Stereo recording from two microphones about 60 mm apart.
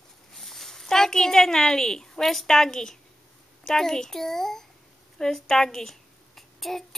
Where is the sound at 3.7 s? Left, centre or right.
Centre.